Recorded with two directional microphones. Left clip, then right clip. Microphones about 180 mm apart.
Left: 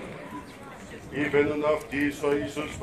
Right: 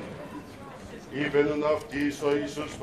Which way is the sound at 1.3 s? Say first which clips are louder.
Left 1 dB; 25° right (ahead or behind).